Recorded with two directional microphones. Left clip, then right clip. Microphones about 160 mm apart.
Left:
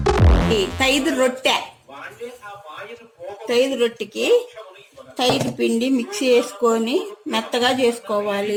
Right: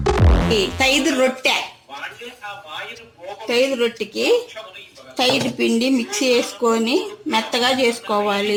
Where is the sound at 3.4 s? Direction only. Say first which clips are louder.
Even; 30° right (ahead or behind).